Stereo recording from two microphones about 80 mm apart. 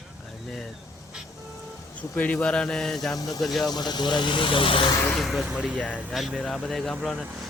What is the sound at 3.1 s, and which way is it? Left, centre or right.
Speech, left.